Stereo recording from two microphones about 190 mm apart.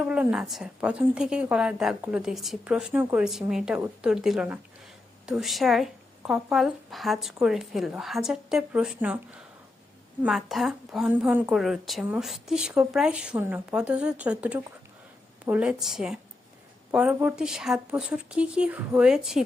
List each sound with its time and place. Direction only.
0.0 s a woman's voice: 5° right (ahead or behind)
10.2 s a woman's voice: centre (ahead or behind)